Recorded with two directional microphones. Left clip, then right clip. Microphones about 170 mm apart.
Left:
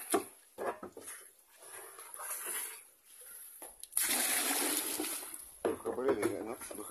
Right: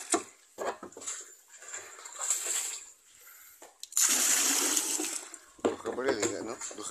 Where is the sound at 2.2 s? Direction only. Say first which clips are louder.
Right 9 dB; 40° right (ahead or behind).